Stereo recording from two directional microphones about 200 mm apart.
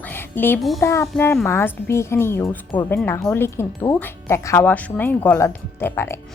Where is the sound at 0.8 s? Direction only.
15° left (ahead or behind).